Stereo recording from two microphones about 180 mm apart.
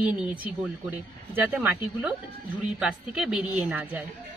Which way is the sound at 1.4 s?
10° right (ahead or behind).